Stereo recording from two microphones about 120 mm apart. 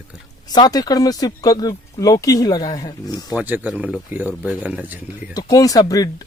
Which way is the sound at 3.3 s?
15° right (ahead or behind).